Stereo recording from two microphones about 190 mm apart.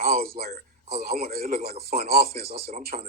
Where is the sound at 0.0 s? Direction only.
45° right (ahead or behind).